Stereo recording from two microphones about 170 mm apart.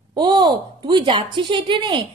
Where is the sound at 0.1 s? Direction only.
25° right (ahead or behind).